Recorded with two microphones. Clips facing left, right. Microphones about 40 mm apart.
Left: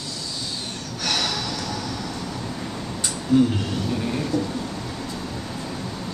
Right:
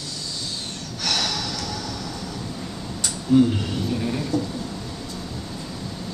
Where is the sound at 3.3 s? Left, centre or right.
Centre.